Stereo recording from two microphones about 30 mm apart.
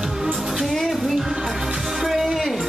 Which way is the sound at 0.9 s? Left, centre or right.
Centre.